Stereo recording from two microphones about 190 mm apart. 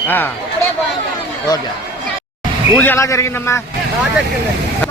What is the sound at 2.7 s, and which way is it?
Speech, 10° left (ahead or behind).